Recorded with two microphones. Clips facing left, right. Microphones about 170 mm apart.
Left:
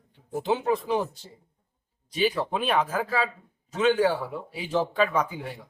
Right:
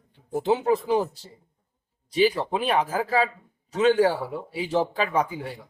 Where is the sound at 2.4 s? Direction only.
30° right (ahead or behind).